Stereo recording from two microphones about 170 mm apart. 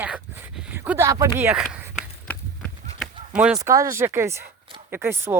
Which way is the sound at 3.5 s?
20° right (ahead or behind).